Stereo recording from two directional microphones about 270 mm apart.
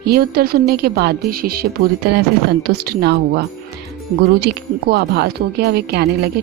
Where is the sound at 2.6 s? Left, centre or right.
Right.